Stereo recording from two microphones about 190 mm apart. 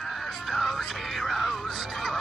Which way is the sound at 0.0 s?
Centre (ahead or behind).